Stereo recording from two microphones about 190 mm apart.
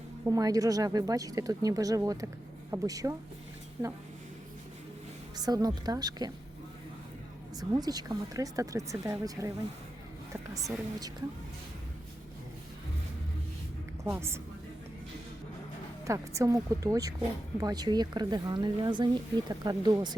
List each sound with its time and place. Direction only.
0.3 s speech: 20° right (ahead or behind)
5.4 s speech: 20° right (ahead or behind)
7.6 s speech: 20° right (ahead or behind)
14.0 s a woman's voice: 15° right (ahead or behind)
16.0 s a woman's voice: 15° right (ahead or behind)